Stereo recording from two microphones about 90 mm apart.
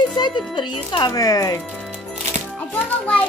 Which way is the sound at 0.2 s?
60° left (ahead or behind).